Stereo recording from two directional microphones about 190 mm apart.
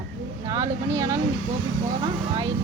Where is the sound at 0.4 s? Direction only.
20° right (ahead or behind).